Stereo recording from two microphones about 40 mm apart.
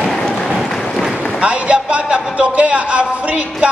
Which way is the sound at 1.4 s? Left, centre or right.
Right.